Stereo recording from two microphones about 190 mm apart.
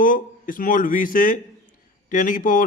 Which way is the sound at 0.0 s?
45° left (ahead or behind).